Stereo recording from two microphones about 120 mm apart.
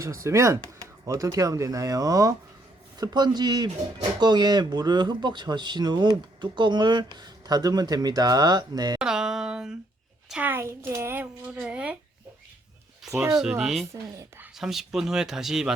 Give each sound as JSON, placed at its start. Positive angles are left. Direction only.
{"t": 0.0, "sound": "speech", "side_deg": -25}
{"t": 9.0, "sound": "a sound", "side_deg": -5}
{"t": 10.2, "sound": "a woman's voice", "side_deg": -10}
{"t": 13.1, "sound": "speech", "side_deg": -25}
{"t": 13.4, "sound": "speech", "side_deg": -5}
{"t": 13.9, "sound": "speech", "side_deg": -25}
{"t": 14.5, "sound": "speech", "side_deg": -5}